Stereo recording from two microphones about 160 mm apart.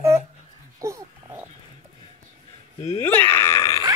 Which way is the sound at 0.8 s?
15° right (ahead or behind).